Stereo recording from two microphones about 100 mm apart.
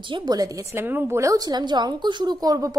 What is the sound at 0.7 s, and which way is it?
A woman's voice, 20° right (ahead or behind).